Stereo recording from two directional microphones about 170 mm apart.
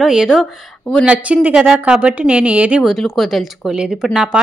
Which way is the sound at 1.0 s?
5° right (ahead or behind).